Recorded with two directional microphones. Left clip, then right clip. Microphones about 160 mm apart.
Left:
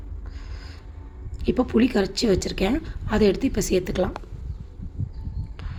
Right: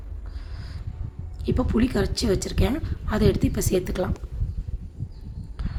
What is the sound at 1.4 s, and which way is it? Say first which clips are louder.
A woman's voice: left 3 dB; 10° left (ahead or behind).